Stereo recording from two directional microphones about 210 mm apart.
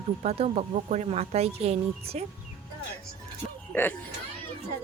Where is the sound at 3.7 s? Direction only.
10° left (ahead or behind).